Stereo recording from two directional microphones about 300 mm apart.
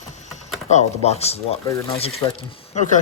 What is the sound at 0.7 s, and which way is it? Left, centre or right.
Speech, left.